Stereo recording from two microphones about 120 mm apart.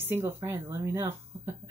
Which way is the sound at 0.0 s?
20° right (ahead or behind).